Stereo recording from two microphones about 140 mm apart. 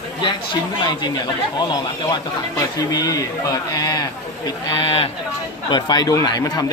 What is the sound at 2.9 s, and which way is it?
Speech, 25° left (ahead or behind).